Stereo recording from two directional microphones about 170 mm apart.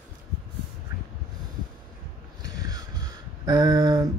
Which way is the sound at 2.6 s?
20° right (ahead or behind).